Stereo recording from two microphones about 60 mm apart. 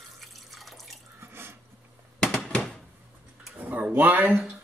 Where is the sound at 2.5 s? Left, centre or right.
Centre.